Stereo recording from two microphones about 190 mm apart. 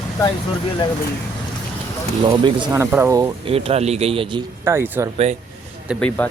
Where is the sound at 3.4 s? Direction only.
30° right (ahead or behind).